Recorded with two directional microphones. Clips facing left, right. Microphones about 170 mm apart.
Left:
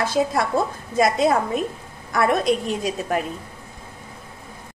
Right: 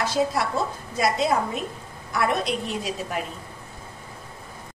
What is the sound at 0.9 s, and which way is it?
A woman's voice, 50° left (ahead or behind).